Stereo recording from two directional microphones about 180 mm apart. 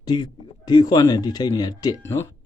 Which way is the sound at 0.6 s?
25° left (ahead or behind).